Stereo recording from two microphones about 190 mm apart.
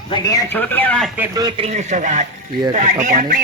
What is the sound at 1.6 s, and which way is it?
Speech, 40° right (ahead or behind).